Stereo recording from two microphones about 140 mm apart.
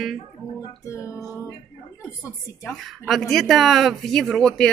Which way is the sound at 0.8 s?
20° left (ahead or behind).